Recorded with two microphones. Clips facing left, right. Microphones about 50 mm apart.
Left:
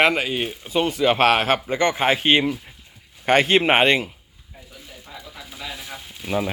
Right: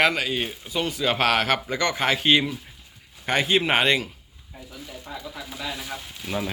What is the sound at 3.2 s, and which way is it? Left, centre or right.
Speech, left.